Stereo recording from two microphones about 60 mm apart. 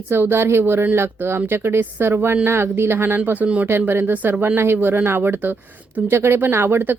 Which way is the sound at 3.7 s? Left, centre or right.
Right.